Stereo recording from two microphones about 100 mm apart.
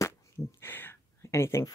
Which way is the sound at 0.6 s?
20° left (ahead or behind).